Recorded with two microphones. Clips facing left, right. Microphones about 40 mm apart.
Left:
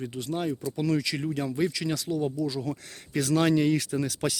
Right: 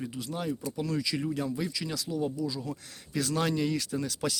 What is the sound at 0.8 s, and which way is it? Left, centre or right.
Speech, left.